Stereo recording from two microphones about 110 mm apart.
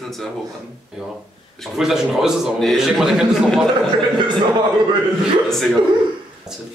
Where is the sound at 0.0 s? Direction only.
Centre (ahead or behind).